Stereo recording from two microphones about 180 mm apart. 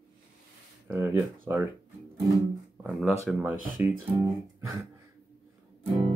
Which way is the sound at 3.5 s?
50° right (ahead or behind).